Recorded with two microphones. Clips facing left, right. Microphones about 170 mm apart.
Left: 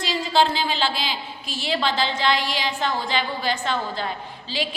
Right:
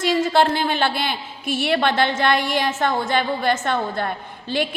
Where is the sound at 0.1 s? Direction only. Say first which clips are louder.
Right 3 dB; 55° right (ahead or behind).